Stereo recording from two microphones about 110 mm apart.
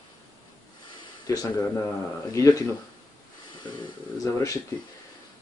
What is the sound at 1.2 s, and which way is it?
Speech, 35° left (ahead or behind).